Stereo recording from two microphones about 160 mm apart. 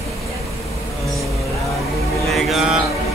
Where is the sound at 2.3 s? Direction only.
Centre (ahead or behind).